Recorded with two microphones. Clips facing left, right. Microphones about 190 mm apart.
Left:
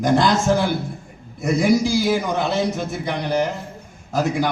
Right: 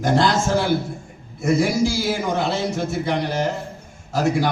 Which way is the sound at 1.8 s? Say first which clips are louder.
Left 1 dB; 15° left (ahead or behind).